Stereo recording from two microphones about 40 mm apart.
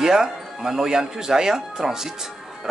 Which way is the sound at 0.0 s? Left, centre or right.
Centre.